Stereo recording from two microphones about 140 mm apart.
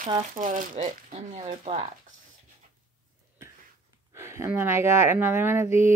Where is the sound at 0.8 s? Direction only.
60° right (ahead or behind).